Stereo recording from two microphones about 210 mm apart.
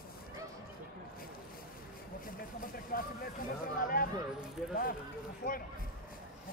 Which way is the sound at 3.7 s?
40° left (ahead or behind).